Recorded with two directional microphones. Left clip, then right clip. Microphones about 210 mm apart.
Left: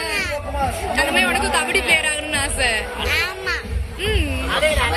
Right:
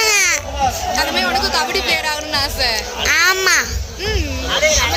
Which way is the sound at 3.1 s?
45° right (ahead or behind).